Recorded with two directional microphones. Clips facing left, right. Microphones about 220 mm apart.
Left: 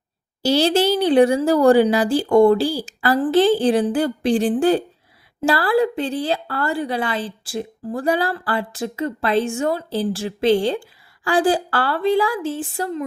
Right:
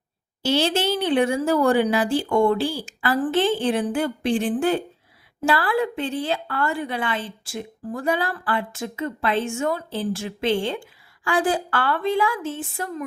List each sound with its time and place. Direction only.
0.4 s speech: 35° left (ahead or behind)